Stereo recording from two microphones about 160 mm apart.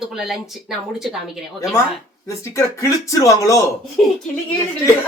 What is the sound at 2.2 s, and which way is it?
Speech, 20° left (ahead or behind).